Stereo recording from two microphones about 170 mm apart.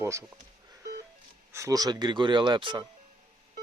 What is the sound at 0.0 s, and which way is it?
Speech, 15° right (ahead or behind).